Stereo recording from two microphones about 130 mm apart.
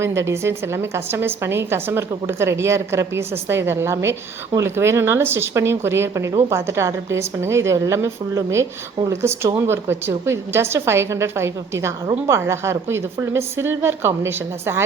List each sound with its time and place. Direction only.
0.0 s a woman's voice: 20° right (ahead or behind)